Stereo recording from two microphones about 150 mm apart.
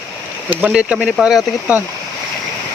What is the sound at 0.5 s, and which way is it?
Speech, 10° right (ahead or behind).